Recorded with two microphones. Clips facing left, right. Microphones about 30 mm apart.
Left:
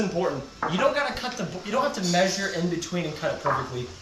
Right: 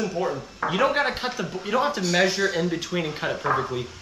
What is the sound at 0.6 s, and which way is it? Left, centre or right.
Speech, centre.